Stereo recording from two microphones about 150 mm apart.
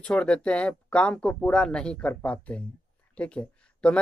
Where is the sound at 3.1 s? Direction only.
5° left (ahead or behind).